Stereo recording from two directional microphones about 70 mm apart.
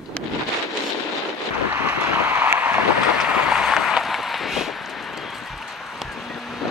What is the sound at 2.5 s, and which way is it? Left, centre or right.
Boat, right.